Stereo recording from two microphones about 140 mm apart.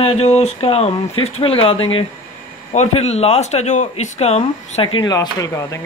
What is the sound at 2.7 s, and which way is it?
Speech, 50° left (ahead or behind).